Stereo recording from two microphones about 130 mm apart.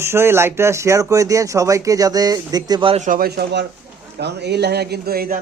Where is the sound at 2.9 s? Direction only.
80° right.